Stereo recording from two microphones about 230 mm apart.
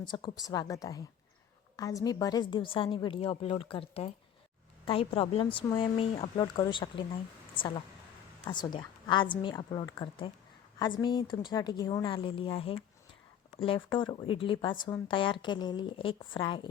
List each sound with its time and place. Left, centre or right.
0.1 s a woman's voice: centre